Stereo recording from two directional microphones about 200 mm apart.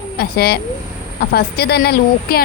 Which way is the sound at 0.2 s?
50° left (ahead or behind).